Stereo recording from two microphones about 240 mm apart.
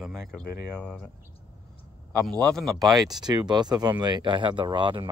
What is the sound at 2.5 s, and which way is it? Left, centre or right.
Speech, centre.